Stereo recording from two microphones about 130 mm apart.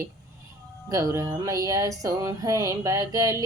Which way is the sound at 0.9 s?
25° right (ahead or behind).